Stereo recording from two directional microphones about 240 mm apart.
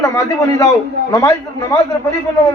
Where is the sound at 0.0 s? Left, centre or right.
Centre.